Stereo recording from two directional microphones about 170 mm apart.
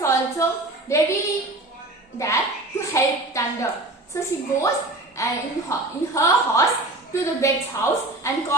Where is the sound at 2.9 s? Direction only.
20° left (ahead or behind).